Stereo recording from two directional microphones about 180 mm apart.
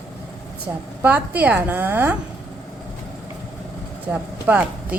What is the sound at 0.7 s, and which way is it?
A woman's voice, 10° right (ahead or behind).